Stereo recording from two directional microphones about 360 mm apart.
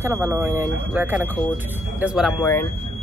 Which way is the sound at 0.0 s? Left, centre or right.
Centre.